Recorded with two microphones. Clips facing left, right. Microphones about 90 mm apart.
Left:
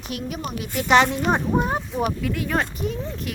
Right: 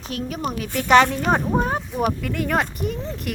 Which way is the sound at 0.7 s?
15° left (ahead or behind).